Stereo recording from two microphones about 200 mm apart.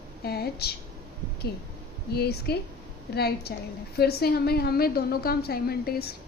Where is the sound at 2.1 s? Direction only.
55° left (ahead or behind).